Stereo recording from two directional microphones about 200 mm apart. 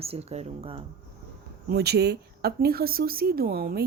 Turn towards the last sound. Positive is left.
turn(degrees=-50)  # may be behind; listen again after turning